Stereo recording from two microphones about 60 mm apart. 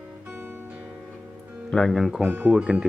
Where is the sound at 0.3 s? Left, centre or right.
Right.